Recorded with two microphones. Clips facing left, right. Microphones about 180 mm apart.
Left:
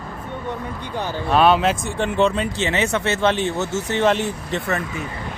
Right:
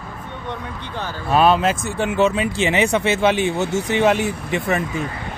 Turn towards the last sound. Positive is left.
turn(degrees=-10)  # may be behind; listen again after turning